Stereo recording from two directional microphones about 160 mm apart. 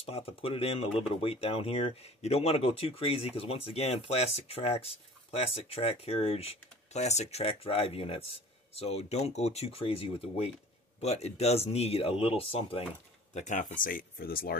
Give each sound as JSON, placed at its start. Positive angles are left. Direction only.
{"t": 0.0, "sound": "speech", "side_deg": 35}
{"t": 13.3, "sound": "speech", "side_deg": 50}